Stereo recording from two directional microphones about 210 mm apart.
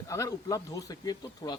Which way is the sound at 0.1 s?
15° left (ahead or behind).